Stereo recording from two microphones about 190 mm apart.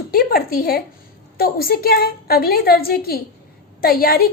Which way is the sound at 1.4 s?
55° left (ahead or behind).